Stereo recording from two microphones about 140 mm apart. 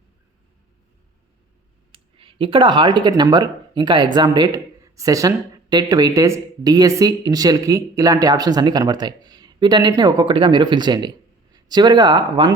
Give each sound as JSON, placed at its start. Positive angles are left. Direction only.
{"t": 1.9, "sound": "speech", "side_deg": -40}